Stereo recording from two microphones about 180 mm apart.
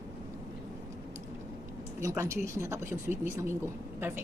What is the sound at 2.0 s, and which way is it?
Speech, 15° right (ahead or behind).